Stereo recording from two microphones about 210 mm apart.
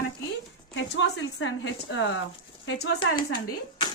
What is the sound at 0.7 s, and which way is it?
Speech, 60° left (ahead or behind).